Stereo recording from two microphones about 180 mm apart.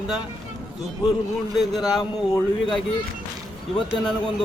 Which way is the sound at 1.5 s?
Centre (ahead or behind).